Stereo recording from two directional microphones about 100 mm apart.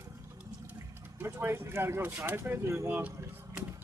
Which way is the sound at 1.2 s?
20° right (ahead or behind).